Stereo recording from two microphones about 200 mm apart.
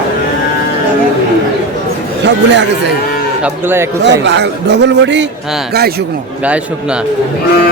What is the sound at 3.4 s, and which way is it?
Speech, 10° right (ahead or behind).